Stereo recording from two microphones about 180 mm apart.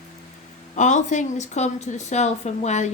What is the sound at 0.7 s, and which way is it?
A woman's voice, 40° left (ahead or behind).